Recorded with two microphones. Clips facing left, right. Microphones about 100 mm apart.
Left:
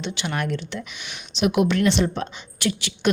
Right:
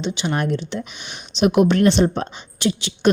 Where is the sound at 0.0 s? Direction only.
20° right (ahead or behind).